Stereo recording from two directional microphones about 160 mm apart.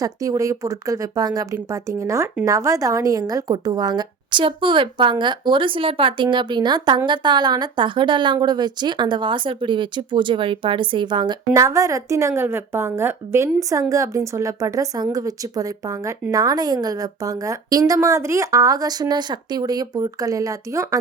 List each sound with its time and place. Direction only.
0.0 s a woman's voice: 20° right (ahead or behind)